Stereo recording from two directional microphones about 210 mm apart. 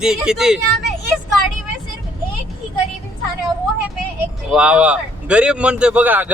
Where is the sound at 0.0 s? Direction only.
5° right (ahead or behind).